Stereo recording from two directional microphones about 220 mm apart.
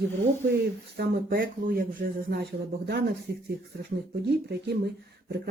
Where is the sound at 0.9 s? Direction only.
45° right (ahead or behind).